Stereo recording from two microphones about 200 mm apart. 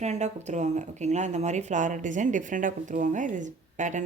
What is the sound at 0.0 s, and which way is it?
Speech, 35° right (ahead or behind).